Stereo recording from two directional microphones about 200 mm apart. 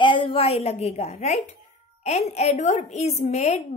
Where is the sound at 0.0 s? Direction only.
25° left (ahead or behind).